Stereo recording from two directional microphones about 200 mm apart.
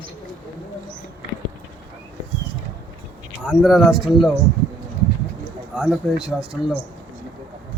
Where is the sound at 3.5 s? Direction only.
Centre (ahead or behind).